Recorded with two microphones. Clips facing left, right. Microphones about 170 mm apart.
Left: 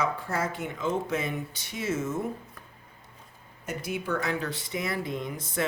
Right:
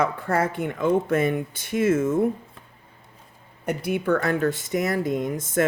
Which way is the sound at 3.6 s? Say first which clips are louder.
Right 8 dB; 60° right (ahead or behind).